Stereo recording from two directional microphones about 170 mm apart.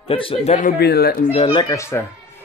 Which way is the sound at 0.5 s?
60° left (ahead or behind).